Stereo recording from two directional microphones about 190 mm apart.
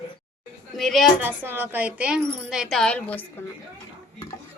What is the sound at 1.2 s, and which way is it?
A woman's voice, 10° right (ahead or behind).